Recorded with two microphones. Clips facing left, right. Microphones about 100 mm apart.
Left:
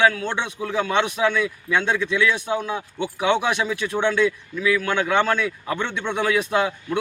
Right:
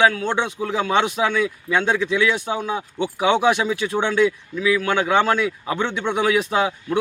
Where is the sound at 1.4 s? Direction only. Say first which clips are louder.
Right 2 dB; 35° right (ahead or behind).